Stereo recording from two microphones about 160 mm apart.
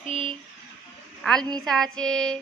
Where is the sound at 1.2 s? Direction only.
5° left (ahead or behind).